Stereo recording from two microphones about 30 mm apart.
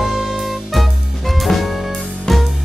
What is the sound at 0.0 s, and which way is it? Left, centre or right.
Music, centre.